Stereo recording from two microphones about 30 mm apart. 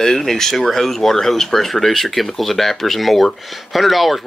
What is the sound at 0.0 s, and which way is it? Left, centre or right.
Speech, centre.